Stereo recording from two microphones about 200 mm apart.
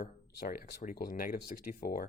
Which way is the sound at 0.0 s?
45° left (ahead or behind).